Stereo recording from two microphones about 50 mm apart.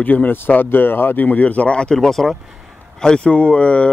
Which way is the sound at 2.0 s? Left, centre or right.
Centre.